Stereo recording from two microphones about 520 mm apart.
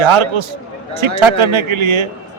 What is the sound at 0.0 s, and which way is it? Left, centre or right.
A man's voice, right.